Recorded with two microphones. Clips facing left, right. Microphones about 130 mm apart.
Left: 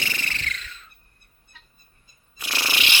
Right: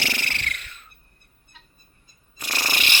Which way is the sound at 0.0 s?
75° right (ahead or behind).